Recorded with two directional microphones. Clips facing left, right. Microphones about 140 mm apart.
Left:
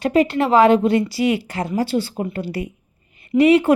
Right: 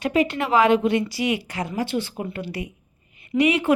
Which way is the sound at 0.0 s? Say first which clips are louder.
Left 5 dB; 35° left (ahead or behind).